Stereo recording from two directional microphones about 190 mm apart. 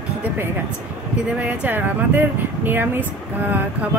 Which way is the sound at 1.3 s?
10° right (ahead or behind).